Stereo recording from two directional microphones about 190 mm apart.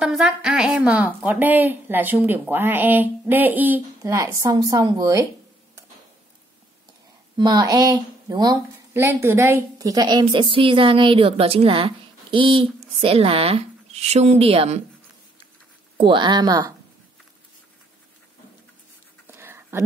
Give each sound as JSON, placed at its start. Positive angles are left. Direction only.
{"t": 0.0, "sound": "a woman's voice", "side_deg": -5}
{"t": 7.3, "sound": "a woman's voice", "side_deg": -20}
{"t": 16.0, "sound": "a woman's voice", "side_deg": -25}
{"t": 19.2, "sound": "whispering", "side_deg": -10}